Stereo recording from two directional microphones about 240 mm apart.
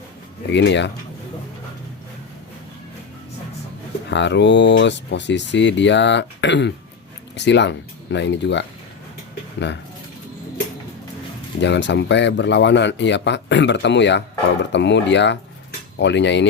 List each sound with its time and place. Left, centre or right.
0.5 s speech: left
4.1 s speech: left
9.6 s speech: left
11.6 s speech: left